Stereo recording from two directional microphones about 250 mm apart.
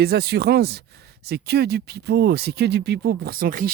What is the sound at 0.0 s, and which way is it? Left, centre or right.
Speech, right.